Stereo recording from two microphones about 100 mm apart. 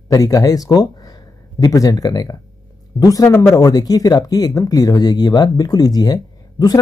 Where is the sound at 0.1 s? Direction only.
35° left (ahead or behind).